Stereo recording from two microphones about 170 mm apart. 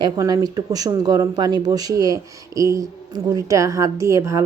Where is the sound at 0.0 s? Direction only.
20° right (ahead or behind).